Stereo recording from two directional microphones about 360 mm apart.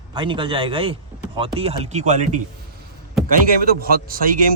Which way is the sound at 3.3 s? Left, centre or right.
Right.